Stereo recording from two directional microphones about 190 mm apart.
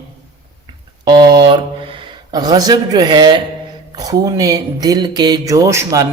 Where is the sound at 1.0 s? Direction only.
25° right (ahead or behind).